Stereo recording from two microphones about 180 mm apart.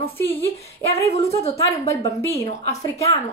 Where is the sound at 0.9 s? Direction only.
35° left (ahead or behind).